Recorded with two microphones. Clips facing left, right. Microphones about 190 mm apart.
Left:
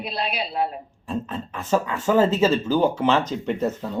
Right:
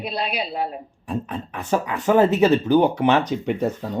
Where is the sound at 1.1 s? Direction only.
15° right (ahead or behind).